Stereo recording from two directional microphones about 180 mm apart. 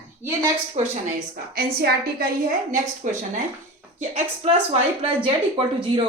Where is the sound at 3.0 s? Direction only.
45° right (ahead or behind).